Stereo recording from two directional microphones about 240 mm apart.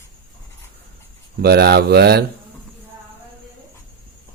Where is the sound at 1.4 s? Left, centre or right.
Right.